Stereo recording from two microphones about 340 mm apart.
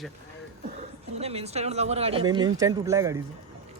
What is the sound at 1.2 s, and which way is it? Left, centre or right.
Speech, centre.